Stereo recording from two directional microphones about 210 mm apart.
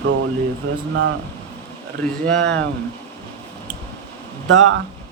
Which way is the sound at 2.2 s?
5° left (ahead or behind).